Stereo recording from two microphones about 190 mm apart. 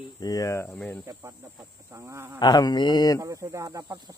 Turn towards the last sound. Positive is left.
turn(degrees=-20)  # may be behind; listen again after turning